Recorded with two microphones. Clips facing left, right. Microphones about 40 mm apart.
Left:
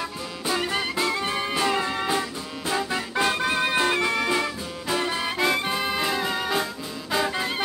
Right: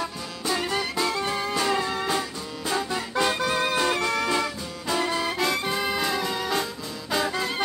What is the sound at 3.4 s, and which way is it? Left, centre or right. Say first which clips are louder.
Music: left 1 dB; left.